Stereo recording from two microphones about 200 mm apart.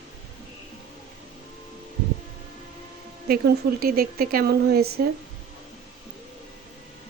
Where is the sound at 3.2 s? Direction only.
50° right (ahead or behind).